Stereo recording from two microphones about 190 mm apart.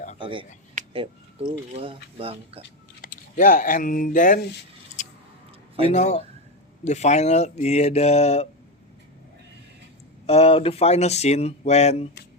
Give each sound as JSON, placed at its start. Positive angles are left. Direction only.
{"t": 0.2, "sound": "speech", "side_deg": -25}
{"t": 0.8, "sound": "a sound", "side_deg": -40}
{"t": 1.5, "sound": "speech", "side_deg": -30}
{"t": 3.0, "sound": "speech", "side_deg": 45}
{"t": 5.8, "sound": "speech", "side_deg": 35}
{"t": 10.2, "sound": "speech", "side_deg": 30}